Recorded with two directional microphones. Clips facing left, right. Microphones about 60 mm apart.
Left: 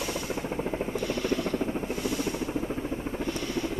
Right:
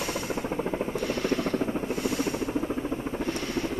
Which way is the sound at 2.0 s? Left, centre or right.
Right.